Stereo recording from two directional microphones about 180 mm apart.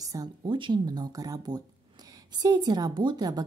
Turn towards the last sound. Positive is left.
turn(degrees=-20)  # may be behind; listen again after turning